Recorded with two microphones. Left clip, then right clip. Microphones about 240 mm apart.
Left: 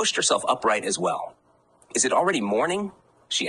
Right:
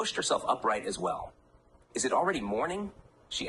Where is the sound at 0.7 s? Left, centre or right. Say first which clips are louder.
Left 8 dB; left.